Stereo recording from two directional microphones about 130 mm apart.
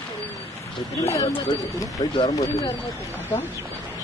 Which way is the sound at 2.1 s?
35° left (ahead or behind).